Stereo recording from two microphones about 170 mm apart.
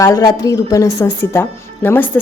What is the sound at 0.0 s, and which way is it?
A woman's voice, 20° left (ahead or behind).